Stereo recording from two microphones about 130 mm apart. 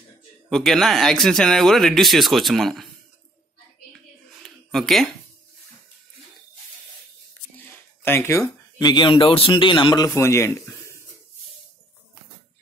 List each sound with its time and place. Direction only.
0.5 s speech: 5° left (ahead or behind)
4.4 s a sound: centre (ahead or behind)
7.5 s speech: 15° left (ahead or behind); by 10.1 s 35° left (ahead or behind)
10.1 s speech: 20° left (ahead or behind)